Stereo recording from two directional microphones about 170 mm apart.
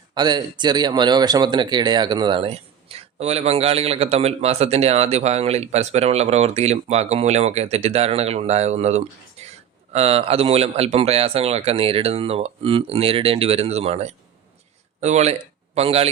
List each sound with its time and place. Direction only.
0.1 s speech: 25° right (ahead or behind)